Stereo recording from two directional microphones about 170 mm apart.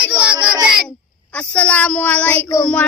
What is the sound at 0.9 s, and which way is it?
Speech, 5° left (ahead or behind).